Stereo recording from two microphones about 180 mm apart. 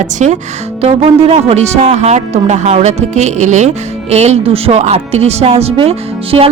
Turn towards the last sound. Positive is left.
turn(degrees=-30)  # may be behind; listen again after turning